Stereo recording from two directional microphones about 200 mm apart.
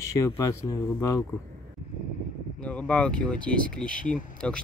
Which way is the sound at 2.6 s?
5° left (ahead or behind).